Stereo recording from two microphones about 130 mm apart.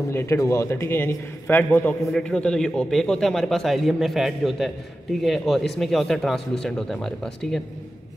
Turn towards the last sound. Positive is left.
turn(degrees=5)  # may be behind; listen again after turning